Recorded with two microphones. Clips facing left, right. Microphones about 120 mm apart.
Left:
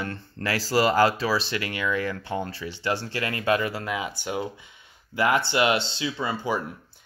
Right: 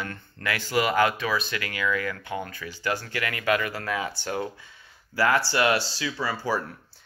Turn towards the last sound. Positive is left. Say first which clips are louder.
# even
turn(degrees=20)  # may be behind; listen again after turning